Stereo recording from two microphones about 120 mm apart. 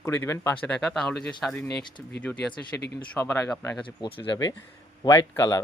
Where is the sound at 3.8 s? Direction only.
45° left (ahead or behind).